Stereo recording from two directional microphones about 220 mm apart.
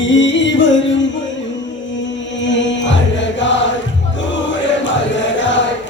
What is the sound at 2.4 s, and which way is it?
Chant, 55° left (ahead or behind).